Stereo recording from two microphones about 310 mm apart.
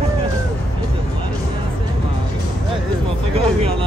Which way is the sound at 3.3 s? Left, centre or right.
Centre.